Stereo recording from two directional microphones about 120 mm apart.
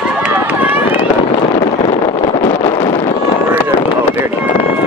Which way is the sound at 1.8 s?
45° left (ahead or behind).